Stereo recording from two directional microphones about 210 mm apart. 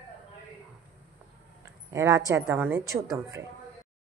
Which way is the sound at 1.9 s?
15° right (ahead or behind).